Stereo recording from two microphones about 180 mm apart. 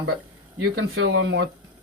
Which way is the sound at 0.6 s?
85° right.